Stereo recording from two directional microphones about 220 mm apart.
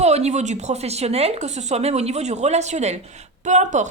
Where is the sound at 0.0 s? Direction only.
30° right (ahead or behind).